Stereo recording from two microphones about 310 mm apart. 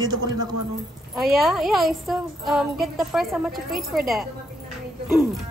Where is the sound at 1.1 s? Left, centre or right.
Centre.